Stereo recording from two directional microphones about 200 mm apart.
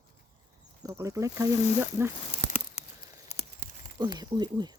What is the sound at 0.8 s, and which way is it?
Speech, 15° right (ahead or behind).